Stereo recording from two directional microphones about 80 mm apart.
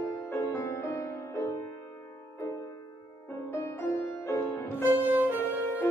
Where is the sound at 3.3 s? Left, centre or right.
Left.